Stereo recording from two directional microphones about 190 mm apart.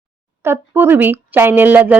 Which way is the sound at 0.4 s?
15° right (ahead or behind).